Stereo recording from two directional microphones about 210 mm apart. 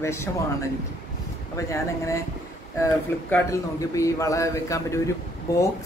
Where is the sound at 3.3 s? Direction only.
15° left (ahead or behind).